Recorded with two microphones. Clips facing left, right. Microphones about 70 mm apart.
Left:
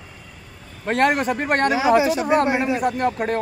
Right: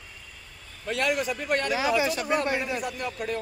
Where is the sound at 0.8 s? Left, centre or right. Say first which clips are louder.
Left 8 dB; left.